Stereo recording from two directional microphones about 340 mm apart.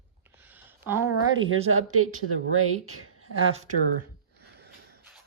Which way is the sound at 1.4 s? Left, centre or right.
Right.